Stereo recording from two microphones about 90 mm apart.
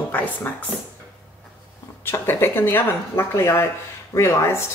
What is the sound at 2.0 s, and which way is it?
Speech, 25° left (ahead or behind).